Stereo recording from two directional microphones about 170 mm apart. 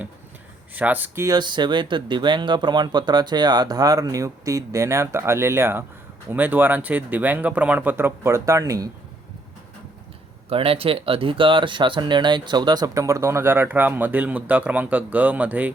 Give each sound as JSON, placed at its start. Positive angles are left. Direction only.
{"t": 0.7, "sound": "speech", "side_deg": -10}
{"t": 10.5, "sound": "speech", "side_deg": -35}